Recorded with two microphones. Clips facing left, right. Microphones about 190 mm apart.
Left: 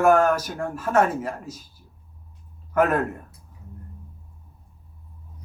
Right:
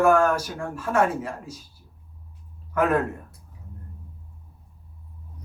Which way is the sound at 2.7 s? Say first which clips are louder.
Left 2 dB; 45° left (ahead or behind).